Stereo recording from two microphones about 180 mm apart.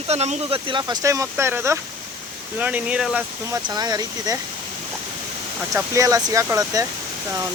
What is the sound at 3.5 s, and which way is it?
Speech, 20° right (ahead or behind).